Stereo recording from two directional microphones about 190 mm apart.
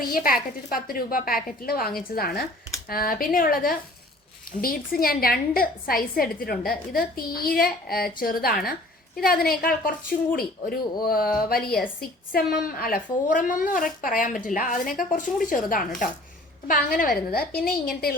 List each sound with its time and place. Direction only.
0.1 s a woman's voice: 50° left (ahead or behind)